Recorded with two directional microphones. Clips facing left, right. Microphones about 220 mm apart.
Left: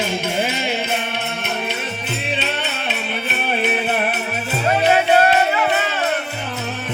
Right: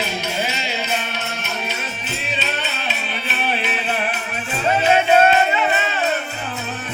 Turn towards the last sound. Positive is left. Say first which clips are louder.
# even
turn(degrees=0)  # may be behind; listen again after turning